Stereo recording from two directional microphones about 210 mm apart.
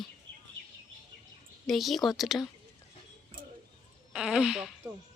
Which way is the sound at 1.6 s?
Centre (ahead or behind).